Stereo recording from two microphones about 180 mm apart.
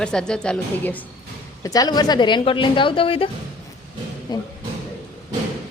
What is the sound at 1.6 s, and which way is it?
A woman's voice, 20° left (ahead or behind).